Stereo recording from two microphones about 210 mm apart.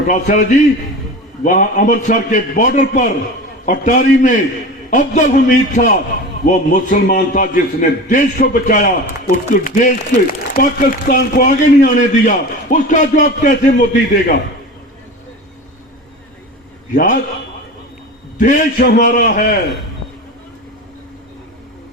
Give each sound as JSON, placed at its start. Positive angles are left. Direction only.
{"t": 0.1, "sound": "a man's voice", "side_deg": 35}
{"t": 16.9, "sound": "a man's voice", "side_deg": 40}
{"t": 18.3, "sound": "a man's voice", "side_deg": 35}